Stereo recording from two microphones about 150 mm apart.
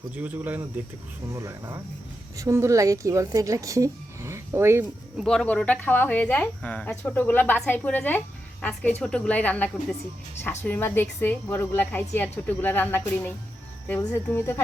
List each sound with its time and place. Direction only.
0.2 s a woman's voice: 10° right (ahead or behind)
5.1 s speech: centre (ahead or behind)